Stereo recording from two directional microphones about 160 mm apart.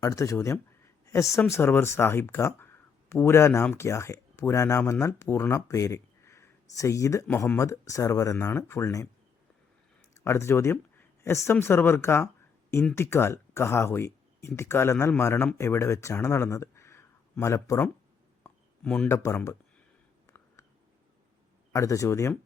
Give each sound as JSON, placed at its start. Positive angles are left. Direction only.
{"t": 0.0, "sound": "speech", "side_deg": 20}
{"t": 10.2, "sound": "speech", "side_deg": 15}
{"t": 20.2, "sound": "a sound", "side_deg": 20}
{"t": 21.7, "sound": "speech", "side_deg": 20}